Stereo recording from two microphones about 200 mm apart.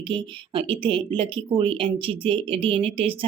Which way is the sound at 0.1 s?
25° right (ahead or behind).